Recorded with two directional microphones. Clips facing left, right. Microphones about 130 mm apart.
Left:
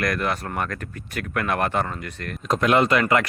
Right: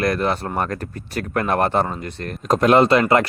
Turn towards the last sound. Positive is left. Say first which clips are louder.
# right 4 dB
turn(degrees=-30)  # may be behind; listen again after turning